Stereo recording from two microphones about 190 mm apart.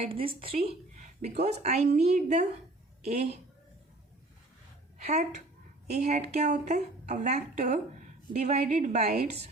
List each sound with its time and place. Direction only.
0.0 s a woman's voice: 30° right (ahead or behind)
4.9 s a woman's voice: 35° right (ahead or behind)